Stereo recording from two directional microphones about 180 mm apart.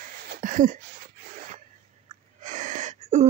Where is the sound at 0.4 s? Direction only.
45° right (ahead or behind).